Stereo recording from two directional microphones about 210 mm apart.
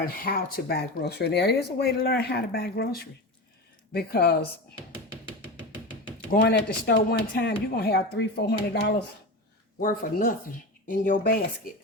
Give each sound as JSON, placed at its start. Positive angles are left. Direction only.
{"t": 0.0, "sound": "speech", "side_deg": 45}
{"t": 6.3, "sound": "speech", "side_deg": 50}
{"t": 9.8, "sound": "speech", "side_deg": 40}